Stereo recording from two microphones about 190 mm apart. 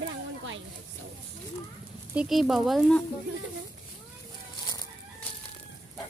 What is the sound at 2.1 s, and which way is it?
Speech, 5° right (ahead or behind).